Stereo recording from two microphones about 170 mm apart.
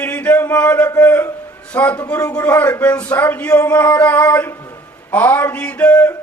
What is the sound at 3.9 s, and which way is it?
Male singing, 10° left (ahead or behind).